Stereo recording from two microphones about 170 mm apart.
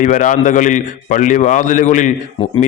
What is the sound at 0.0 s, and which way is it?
A man's voice, 50° left (ahead or behind).